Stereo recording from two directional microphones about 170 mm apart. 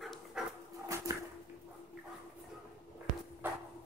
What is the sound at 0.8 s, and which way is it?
Splinter, 20° right (ahead or behind).